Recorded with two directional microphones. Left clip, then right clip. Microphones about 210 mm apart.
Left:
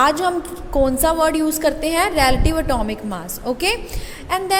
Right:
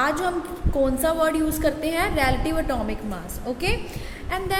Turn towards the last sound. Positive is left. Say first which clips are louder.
# left 6 dB
turn(degrees=30)  # may be behind; listen again after turning